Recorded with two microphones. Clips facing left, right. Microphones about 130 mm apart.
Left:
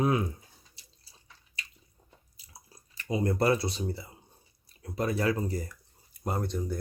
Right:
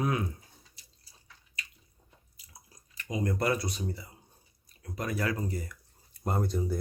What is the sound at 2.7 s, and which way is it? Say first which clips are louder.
Speech: left 4 dB; 30° left (ahead or behind).